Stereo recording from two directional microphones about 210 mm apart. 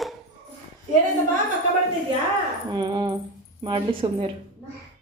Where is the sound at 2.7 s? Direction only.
20° right (ahead or behind).